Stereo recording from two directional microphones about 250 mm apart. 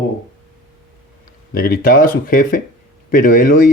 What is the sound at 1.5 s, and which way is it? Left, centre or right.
A man's voice, left.